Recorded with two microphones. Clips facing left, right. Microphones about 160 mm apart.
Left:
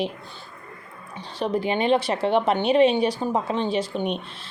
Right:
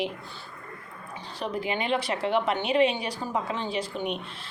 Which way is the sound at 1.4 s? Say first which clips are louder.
Left 7 dB; 30° left (ahead or behind).